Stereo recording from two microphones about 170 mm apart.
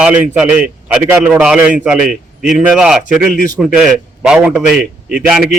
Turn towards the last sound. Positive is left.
turn(degrees=-5)  # may be behind; listen again after turning